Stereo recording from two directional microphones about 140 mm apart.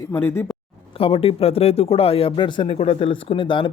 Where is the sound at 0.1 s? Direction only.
15° left (ahead or behind).